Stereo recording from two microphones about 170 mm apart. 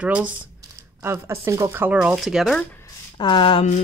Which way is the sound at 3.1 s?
30° left (ahead or behind).